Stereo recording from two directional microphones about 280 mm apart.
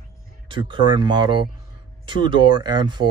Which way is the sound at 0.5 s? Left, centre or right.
Centre.